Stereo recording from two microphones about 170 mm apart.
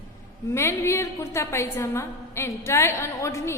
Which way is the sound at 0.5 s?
15° left (ahead or behind).